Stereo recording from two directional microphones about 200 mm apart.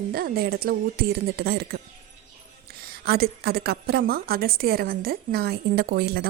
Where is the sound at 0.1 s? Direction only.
50° right (ahead or behind).